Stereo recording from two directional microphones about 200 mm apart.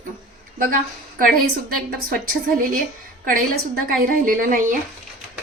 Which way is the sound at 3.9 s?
40° right (ahead or behind).